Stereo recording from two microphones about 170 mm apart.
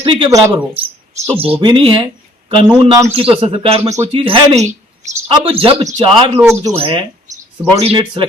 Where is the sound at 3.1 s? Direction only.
35° right (ahead or behind).